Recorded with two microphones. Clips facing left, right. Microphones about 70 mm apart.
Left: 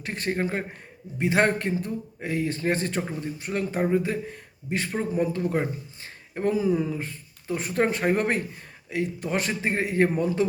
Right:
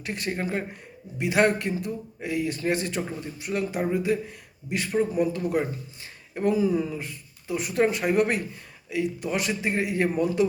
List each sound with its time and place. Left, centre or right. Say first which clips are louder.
0.0 s speech: left 2 dB; left
7.0 s speech: left 2 dB; left